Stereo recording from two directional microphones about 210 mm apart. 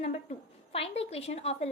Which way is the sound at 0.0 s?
30° left (ahead or behind).